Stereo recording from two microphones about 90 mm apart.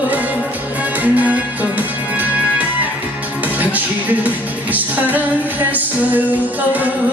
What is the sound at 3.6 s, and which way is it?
Music, 20° right (ahead or behind).